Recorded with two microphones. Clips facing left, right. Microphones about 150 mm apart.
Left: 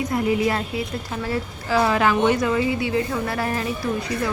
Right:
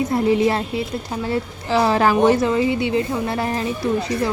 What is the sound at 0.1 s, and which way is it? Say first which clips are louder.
A woman's voice: right 3 dB; 30° right (ahead or behind).